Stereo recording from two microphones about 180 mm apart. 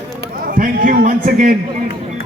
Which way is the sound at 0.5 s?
50° right (ahead or behind).